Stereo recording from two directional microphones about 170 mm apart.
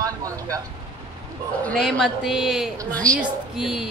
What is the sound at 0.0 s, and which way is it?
Vehicle, 20° right (ahead or behind).